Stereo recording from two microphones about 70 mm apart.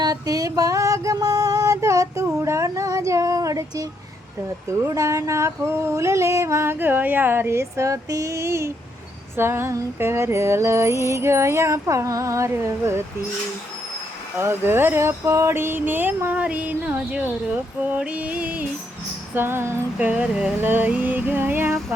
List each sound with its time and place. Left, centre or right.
0.0 s a sound: right
2.4 s female singing: right
4.7 s a sound: right
9.3 s speech: right
10.0 s a sound: right
14.3 s speech: right
15.5 s speech: right
19.3 s speech: right
20.0 s speech: centre